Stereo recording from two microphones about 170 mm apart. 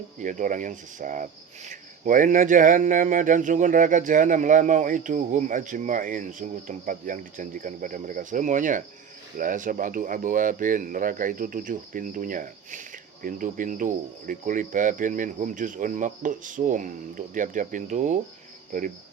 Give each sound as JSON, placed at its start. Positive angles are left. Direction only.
{"t": 0.2, "sound": "speech", "side_deg": -50}